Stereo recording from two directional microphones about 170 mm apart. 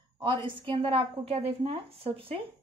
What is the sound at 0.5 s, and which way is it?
Speech, 30° right (ahead or behind).